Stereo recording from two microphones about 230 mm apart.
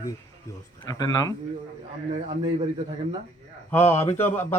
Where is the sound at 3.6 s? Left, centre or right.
Centre.